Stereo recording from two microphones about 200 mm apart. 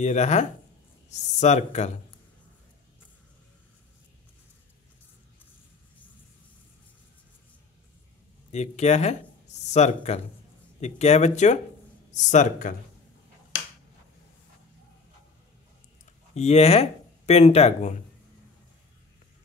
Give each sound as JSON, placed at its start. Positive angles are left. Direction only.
{"t": 0.0, "sound": "speech", "side_deg": 35}
{"t": 8.5, "sound": "speech", "side_deg": 35}
{"t": 16.3, "sound": "speech", "side_deg": 30}